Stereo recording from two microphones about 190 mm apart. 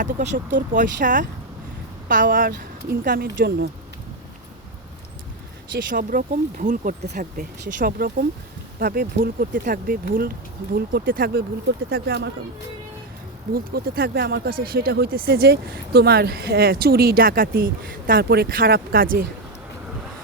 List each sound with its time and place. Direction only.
0.0 s speech: 40° right (ahead or behind); by 3.7 s 55° right (ahead or behind)
5.9 s speech: 45° right (ahead or behind)
13.5 s speech: 50° right (ahead or behind)